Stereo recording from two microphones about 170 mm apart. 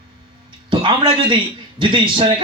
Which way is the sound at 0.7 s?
30° right (ahead or behind).